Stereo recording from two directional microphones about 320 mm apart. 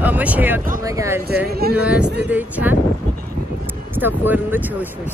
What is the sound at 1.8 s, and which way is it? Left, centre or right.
Speech, centre.